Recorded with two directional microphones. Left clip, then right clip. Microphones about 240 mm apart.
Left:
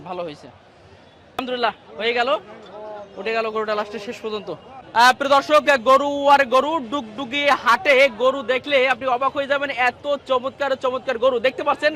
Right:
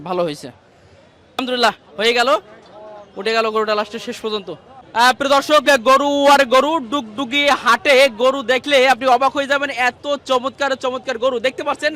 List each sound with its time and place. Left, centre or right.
0.0 s a man's voice: right
4.9 s speech: centre